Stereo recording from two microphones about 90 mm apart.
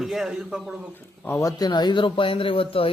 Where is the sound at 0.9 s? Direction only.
25° left (ahead or behind).